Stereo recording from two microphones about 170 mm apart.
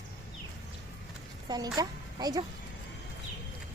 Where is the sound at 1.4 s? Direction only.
20° right (ahead or behind).